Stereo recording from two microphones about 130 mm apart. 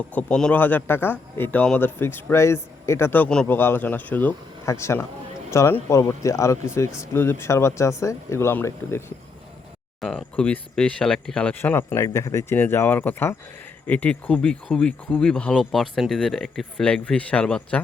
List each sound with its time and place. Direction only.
0.1 s speech: 10° left (ahead or behind)
10.0 s speech: 5° left (ahead or behind)